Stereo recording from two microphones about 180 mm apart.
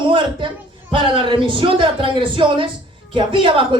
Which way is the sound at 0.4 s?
30° right (ahead or behind).